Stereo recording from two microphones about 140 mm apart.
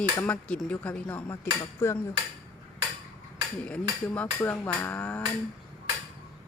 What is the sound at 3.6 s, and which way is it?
Speech, 10° left (ahead or behind).